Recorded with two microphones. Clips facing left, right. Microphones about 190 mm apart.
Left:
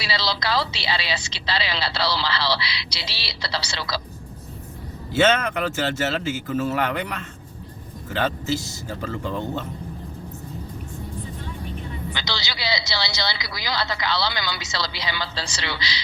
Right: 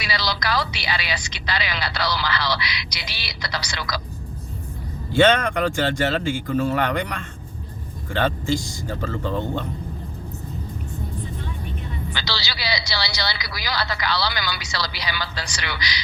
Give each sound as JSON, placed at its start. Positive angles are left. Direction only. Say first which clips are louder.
{"t": 0.0, "sound": "speech", "louder": "even", "side_deg": 25}
{"t": 5.1, "sound": "speech", "louder": "right 2 dB", "side_deg": 5}
{"t": 12.1, "sound": "speech", "louder": "right 1 dB", "side_deg": 20}